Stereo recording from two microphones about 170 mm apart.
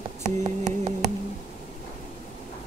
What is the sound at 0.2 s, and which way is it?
Hands, 40° right (ahead or behind).